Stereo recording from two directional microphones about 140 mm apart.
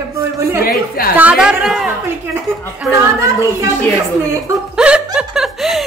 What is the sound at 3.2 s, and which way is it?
Speech, 20° right (ahead or behind).